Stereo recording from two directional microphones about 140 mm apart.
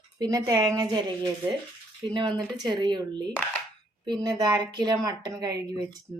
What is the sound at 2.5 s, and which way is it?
Speech, 30° right (ahead or behind).